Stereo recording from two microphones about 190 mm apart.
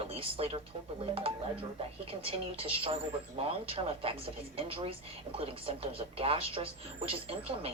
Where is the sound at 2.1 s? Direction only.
30° right (ahead or behind).